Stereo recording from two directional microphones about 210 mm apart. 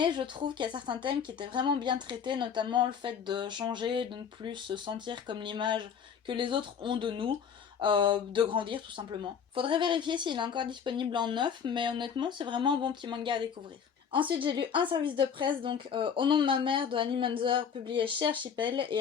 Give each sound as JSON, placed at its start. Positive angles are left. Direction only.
{"t": 0.0, "sound": "speech", "side_deg": -25}